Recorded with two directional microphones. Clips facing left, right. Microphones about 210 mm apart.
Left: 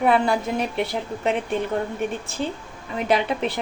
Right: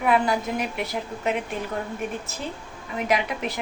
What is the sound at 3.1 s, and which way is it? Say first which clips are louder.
Speech: left 4 dB; 30° left (ahead or behind).